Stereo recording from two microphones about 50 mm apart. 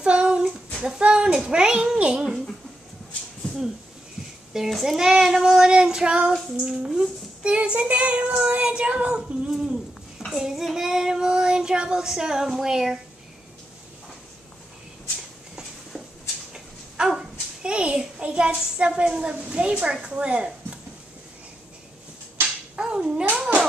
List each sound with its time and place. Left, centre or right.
0.0 s child singing: right
2.0 s a child's voice: centre
4.6 s a child's voice: centre
4.9 s child singing: centre
9.5 s bird: centre
10.3 s child singing: centre
16.5 s a sound: centre
18.8 s child singing: centre
22.8 s a sound: centre
23.3 s cat: centre